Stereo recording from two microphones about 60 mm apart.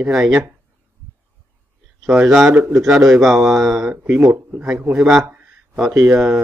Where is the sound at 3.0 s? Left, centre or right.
Centre.